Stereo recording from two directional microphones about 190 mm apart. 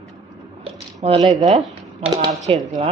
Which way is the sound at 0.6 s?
30° right (ahead or behind).